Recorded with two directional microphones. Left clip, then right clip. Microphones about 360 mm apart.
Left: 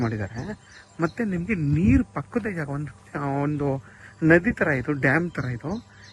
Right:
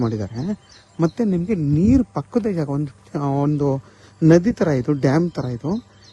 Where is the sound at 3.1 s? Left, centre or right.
Centre.